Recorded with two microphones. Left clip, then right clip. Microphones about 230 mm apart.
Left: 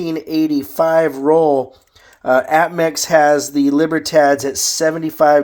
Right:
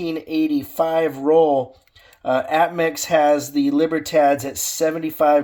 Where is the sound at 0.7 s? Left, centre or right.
Left.